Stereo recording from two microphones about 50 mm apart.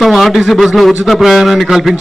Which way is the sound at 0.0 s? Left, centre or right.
Centre.